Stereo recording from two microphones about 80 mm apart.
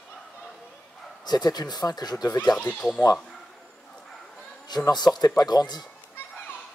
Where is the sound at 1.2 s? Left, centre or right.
Left.